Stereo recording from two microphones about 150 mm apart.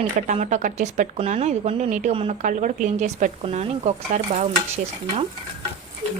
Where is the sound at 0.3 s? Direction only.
50° right (ahead or behind).